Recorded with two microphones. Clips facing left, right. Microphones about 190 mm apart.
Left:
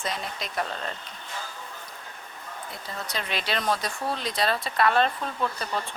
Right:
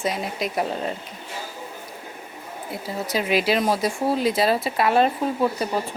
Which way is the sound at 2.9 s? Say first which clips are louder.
Right 10 dB; 5° right (ahead or behind).